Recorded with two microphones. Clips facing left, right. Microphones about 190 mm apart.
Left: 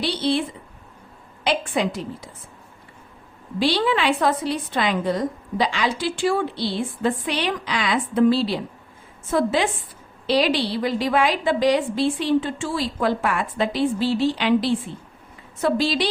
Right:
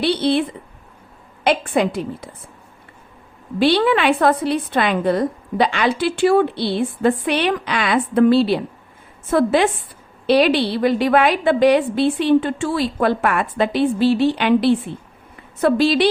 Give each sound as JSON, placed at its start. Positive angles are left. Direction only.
{"t": 0.0, "sound": "a woman's voice", "side_deg": -60}
{"t": 1.5, "sound": "a woman's voice", "side_deg": -55}
{"t": 3.6, "sound": "a woman's voice", "side_deg": -60}